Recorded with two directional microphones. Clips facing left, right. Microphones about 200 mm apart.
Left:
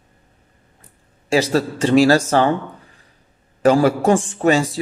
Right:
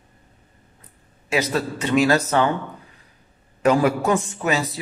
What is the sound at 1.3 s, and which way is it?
Speech, 30° left (ahead or behind).